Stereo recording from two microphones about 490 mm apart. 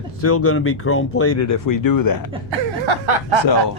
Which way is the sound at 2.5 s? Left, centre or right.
Right.